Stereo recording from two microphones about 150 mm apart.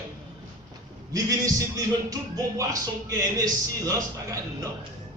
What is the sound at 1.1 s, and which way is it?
A man's voice, 25° right (ahead or behind).